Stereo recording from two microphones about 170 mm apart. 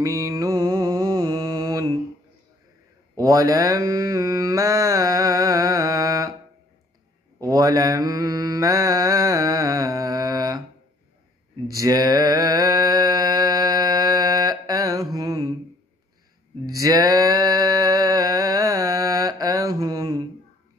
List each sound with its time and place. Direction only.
0.0 s mantra: 20° right (ahead or behind)
3.2 s mantra: 20° right (ahead or behind)
7.3 s mantra: 20° right (ahead or behind)
11.6 s mantra: 20° right (ahead or behind)
16.6 s a sound: 20° right (ahead or behind)